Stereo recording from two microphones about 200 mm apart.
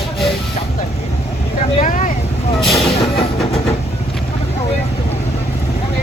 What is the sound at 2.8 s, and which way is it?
Vehicle, 30° left (ahead or behind).